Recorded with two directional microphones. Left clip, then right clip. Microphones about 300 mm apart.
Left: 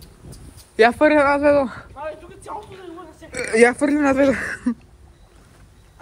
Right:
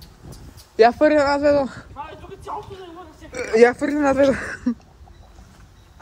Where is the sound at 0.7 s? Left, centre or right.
Left.